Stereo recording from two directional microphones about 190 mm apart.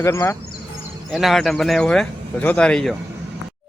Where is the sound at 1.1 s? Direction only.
Centre (ahead or behind).